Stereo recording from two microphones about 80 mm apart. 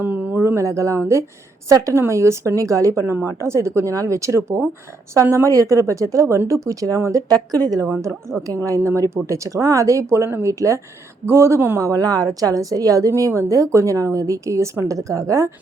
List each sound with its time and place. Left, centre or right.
0.0 s a woman's voice: right
8.9 s a woman's voice: right
11.8 s a woman's voice: right